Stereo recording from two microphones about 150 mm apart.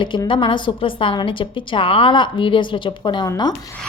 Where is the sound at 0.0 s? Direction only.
30° left (ahead or behind).